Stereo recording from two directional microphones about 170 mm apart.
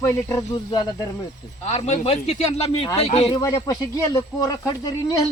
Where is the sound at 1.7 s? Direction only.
40° left (ahead or behind).